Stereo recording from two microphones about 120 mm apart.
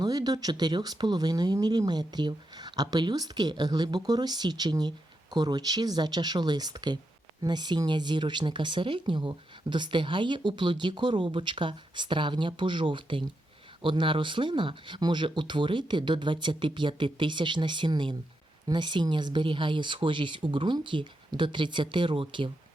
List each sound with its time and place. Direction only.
0.0 s speech: 35° right (ahead or behind)